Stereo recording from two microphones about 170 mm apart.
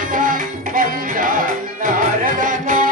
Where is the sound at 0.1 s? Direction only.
55° right (ahead or behind).